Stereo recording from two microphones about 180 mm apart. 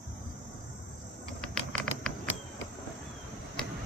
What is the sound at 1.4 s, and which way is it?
Patter, centre (ahead or behind).